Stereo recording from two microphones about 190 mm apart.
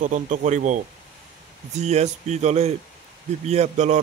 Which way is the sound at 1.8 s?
35° right (ahead or behind).